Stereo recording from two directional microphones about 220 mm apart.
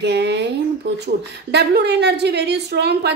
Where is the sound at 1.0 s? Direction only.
50° right (ahead or behind).